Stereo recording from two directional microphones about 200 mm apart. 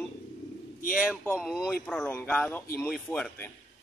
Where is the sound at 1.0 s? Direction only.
5° left (ahead or behind).